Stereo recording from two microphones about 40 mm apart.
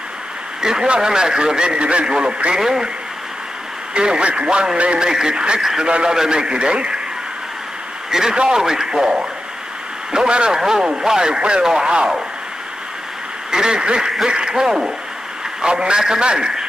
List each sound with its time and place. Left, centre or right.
0.6 s a man's voice: centre
3.9 s a man's voice: right
8.1 s a man's voice: centre
13.5 s a man's voice: centre